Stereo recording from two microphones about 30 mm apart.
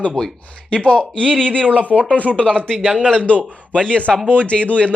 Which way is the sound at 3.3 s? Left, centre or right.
Left.